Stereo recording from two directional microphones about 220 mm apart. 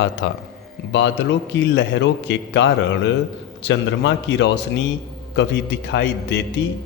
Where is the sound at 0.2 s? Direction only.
55° left (ahead or behind).